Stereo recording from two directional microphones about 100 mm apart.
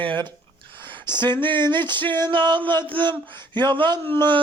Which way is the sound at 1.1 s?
50° right (ahead or behind).